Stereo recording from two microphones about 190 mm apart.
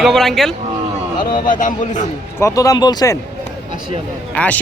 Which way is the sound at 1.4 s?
45° left (ahead or behind).